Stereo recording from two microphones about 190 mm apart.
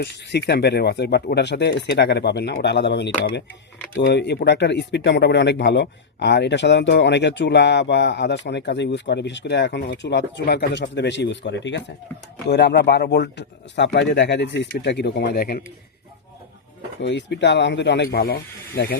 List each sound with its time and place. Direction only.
0.0 s speech: 60° left (ahead or behind)
17.0 s speech: 65° left (ahead or behind)